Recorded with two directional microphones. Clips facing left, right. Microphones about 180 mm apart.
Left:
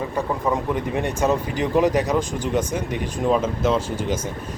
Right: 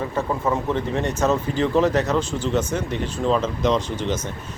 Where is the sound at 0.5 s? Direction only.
10° left (ahead or behind).